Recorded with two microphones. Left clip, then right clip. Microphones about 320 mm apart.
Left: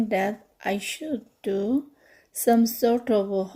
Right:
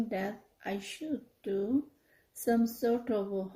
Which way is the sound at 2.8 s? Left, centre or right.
Left.